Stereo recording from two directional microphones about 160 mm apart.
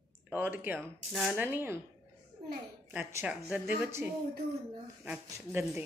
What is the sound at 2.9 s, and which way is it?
Speech, 10° right (ahead or behind).